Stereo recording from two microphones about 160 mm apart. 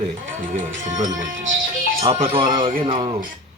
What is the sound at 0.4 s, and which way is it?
Speech, 55° right (ahead or behind).